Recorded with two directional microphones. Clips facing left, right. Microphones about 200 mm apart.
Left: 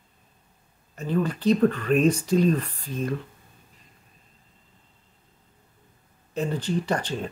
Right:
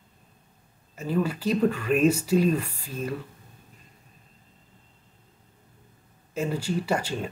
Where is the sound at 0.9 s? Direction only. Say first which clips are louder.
Left 1 dB; 5° right (ahead or behind).